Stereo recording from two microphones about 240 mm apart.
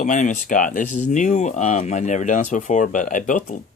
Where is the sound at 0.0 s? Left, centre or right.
Left.